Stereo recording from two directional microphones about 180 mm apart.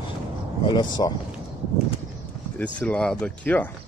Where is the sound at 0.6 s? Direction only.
25° left (ahead or behind).